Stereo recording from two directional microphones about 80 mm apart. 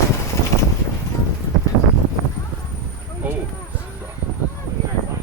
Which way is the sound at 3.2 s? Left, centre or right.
Centre.